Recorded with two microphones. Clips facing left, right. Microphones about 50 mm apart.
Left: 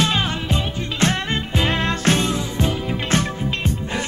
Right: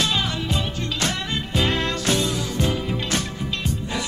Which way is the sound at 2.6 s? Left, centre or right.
Left.